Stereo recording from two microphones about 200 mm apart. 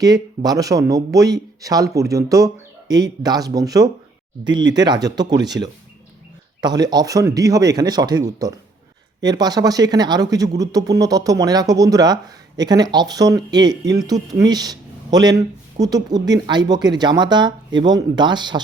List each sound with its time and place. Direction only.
0.0 s speech: 20° right (ahead or behind)